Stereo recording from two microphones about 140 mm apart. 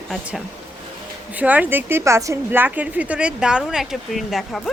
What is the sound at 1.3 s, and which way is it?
A woman's voice, 10° right (ahead or behind).